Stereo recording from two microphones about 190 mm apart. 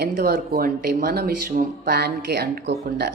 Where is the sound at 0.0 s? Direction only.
55° right (ahead or behind).